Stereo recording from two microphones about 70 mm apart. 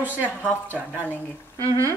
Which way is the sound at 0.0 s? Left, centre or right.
Right.